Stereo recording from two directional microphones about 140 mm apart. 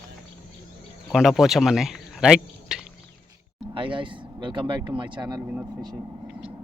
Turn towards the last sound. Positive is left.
turn(degrees=-15)  # may be behind; listen again after turning